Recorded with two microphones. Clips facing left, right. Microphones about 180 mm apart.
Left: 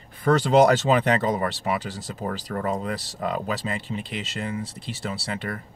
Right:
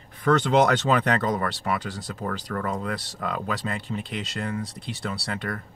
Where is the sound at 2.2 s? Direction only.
30° left (ahead or behind).